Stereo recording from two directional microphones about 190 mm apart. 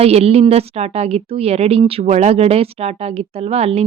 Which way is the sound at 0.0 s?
35° right (ahead or behind).